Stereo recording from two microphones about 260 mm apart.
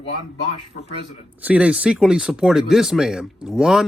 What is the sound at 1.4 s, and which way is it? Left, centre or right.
A man's voice, centre.